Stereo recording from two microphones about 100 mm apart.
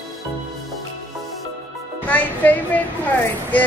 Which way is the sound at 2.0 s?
15° left (ahead or behind).